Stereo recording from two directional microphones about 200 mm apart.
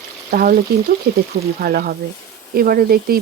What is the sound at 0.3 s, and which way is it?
Frying, 50° right (ahead or behind).